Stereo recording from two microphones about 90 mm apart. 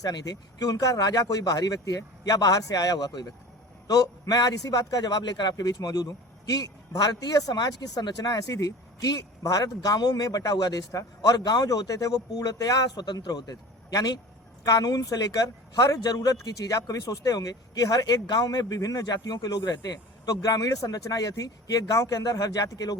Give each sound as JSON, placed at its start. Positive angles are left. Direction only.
{"t": 0.0, "sound": "a man's voice", "side_deg": 45}